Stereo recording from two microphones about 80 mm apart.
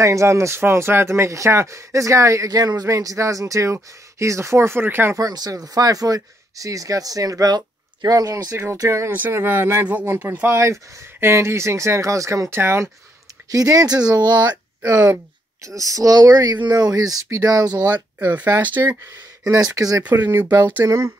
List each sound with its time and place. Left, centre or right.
0.0 s speech: right
5.1 s speech: right
9.1 s speech: right
13.5 s speech: right
15.6 s speech: right
18.2 s speech: right
19.5 s speech: right
20.0 s speech: right
20.8 s speech: right